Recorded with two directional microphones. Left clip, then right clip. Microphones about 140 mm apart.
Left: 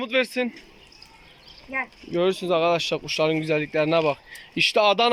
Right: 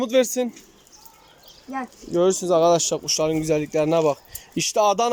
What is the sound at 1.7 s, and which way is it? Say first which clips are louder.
Speech: left 2 dB; 90° right.